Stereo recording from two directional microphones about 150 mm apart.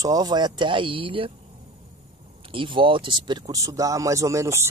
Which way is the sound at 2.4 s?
35° right (ahead or behind).